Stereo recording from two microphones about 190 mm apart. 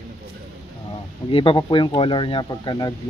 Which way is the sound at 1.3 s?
25° left (ahead or behind).